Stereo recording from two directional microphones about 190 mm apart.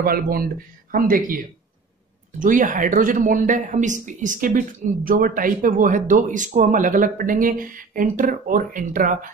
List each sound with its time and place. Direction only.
0.0 s speech: 50° right (ahead or behind)